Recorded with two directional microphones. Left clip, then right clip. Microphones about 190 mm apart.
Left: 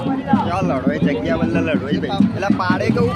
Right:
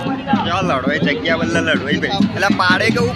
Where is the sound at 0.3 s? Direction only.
Centre (ahead or behind).